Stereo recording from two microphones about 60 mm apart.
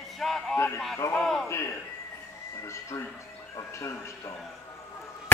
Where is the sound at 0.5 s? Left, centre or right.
Left.